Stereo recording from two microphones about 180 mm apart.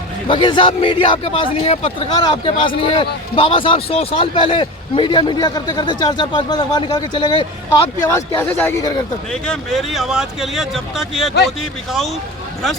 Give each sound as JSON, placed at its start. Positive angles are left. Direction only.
{"t": 0.3, "sound": "a man's voice", "side_deg": 25}
{"t": 9.3, "sound": "speech", "side_deg": 0}